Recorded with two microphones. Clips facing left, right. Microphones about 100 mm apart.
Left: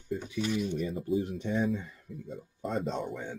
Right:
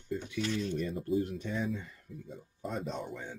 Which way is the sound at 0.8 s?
Centre (ahead or behind).